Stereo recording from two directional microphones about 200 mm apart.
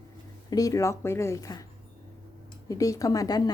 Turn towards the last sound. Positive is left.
turn(degrees=20)  # may be behind; listen again after turning